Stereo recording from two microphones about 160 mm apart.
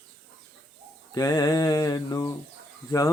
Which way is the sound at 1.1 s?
20° left (ahead or behind).